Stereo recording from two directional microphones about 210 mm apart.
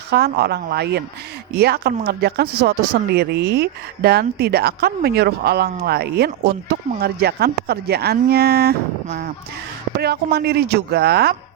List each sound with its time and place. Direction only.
0.1 s speech: 50° right (ahead or behind)
9.0 s speech: 35° right (ahead or behind)
10.0 s speech: 50° right (ahead or behind)